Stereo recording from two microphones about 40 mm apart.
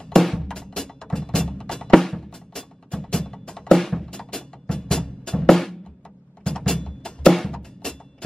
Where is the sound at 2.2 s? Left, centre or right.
Centre.